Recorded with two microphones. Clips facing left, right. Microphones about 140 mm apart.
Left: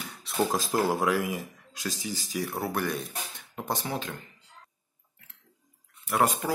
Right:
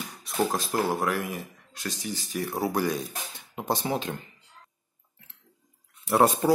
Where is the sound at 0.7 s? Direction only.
10° left (ahead or behind).